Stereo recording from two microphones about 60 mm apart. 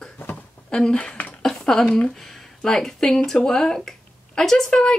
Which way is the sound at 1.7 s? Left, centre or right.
Centre.